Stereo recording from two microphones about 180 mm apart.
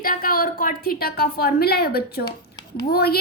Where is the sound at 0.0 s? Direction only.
55° left (ahead or behind).